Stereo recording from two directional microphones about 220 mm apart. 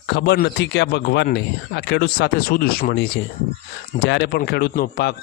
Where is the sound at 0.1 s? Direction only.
50° left (ahead or behind).